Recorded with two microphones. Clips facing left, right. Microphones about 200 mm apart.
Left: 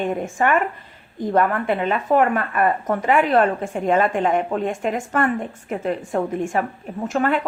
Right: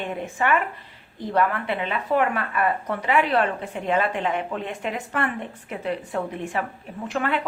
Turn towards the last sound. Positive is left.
turn(degrees=45)  # may be behind; listen again after turning